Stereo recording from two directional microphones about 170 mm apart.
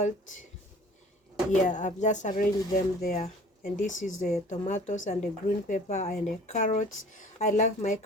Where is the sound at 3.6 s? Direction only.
50° left (ahead or behind).